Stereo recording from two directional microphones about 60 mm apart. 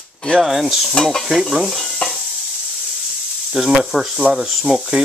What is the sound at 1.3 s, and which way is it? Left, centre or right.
Stir, centre.